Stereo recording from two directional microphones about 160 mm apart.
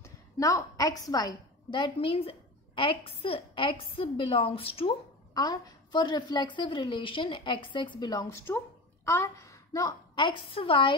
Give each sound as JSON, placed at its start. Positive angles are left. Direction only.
{"t": 0.0, "sound": "a woman's voice", "side_deg": 20}